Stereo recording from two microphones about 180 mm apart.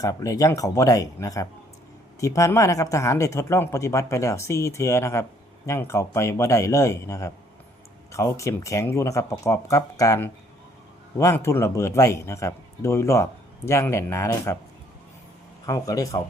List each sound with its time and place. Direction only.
0.0 s speech: 20° left (ahead or behind)
15.6 s speech: 20° left (ahead or behind)